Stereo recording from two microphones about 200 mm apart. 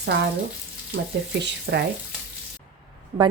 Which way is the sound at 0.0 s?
55° right (ahead or behind).